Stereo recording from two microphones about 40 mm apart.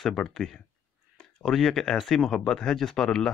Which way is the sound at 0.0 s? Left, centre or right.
Centre.